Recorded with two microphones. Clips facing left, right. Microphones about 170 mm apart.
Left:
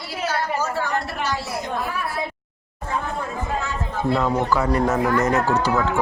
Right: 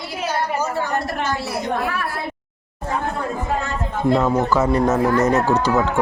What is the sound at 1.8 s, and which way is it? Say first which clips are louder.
Speech: right 3 dB; 70° right (ahead or behind).